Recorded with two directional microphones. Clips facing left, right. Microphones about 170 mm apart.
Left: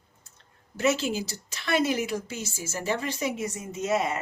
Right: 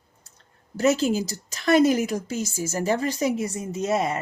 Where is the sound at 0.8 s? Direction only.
40° right (ahead or behind).